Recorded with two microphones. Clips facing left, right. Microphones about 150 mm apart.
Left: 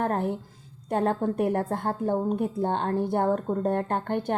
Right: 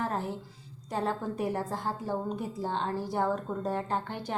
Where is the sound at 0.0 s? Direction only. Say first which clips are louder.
Left 6 dB; 55° left (ahead or behind).